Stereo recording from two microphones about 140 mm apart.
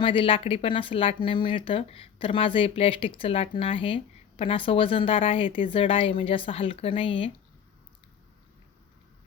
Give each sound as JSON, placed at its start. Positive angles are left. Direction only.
{"t": 0.0, "sound": "speech", "side_deg": 40}